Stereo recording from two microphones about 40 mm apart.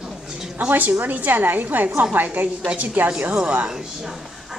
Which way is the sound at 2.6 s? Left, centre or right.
Right.